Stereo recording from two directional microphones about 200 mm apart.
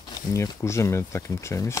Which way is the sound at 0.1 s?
15° left (ahead or behind).